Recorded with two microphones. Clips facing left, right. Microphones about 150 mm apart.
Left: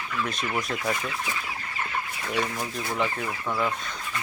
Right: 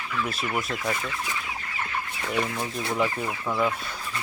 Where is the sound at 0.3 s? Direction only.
5° right (ahead or behind).